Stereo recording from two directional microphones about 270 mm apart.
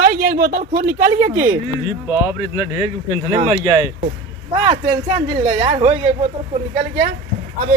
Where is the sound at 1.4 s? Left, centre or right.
Centre.